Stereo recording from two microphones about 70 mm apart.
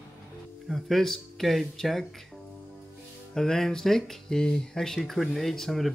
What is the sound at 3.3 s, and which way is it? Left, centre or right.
Speech, centre.